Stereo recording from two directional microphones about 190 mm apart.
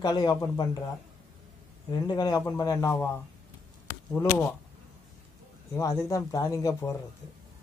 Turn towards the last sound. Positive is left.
turn(degrees=15)  # may be behind; listen again after turning